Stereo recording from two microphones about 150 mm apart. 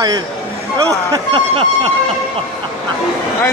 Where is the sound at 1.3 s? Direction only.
35° right (ahead or behind).